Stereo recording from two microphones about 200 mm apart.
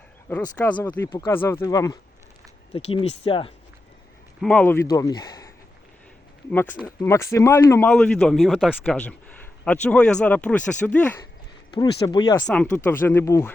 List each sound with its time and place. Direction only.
0.7 s speech: 20° left (ahead or behind)
2.7 s speech: 30° left (ahead or behind)
4.4 s speech: 5° left (ahead or behind)
6.5 s speech: 10° left (ahead or behind)
11.7 s speech: 20° left (ahead or behind)
12.5 s speech: 5° left (ahead or behind)